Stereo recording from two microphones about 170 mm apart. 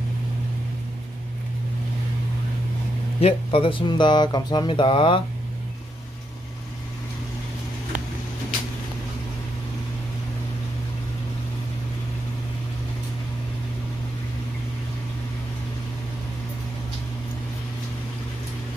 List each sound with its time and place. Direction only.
3.2 s speech: 35° left (ahead or behind)